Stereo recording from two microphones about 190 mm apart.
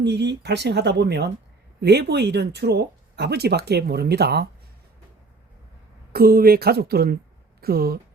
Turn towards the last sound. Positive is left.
turn(degrees=-50)  # may be behind; listen again after turning